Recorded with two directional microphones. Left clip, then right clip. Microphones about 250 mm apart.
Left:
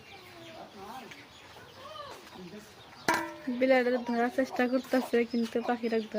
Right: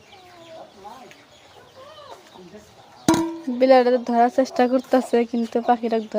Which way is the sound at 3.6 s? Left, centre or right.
Right.